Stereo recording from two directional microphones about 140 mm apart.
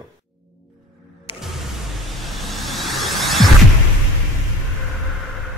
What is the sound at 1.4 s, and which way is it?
Music, centre (ahead or behind).